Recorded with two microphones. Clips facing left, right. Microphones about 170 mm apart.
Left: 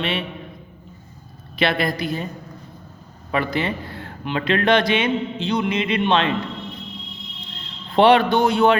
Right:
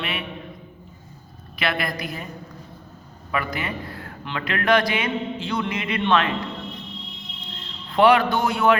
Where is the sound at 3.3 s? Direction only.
30° left (ahead or behind).